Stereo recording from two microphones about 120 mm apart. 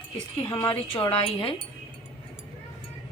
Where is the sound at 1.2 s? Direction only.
50° left (ahead or behind).